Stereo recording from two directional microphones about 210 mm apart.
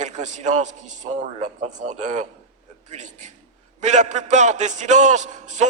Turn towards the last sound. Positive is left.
turn(degrees=-35)  # may be behind; listen again after turning